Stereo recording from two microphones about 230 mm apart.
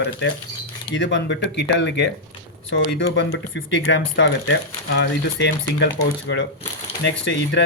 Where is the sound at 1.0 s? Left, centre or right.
Left.